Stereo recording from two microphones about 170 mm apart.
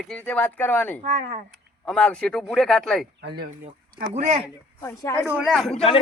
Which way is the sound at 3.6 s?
40° right (ahead or behind).